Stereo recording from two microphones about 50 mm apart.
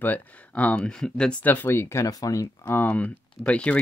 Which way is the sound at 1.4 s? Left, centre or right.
Left.